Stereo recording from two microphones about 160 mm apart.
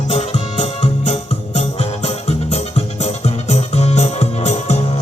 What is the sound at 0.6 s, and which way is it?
Music, 45° left (ahead or behind).